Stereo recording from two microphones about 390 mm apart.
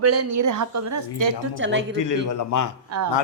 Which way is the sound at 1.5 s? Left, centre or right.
Right.